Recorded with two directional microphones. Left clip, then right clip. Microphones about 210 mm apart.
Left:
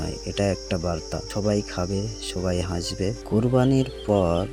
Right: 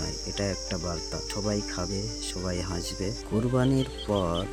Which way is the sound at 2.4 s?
15° left (ahead or behind).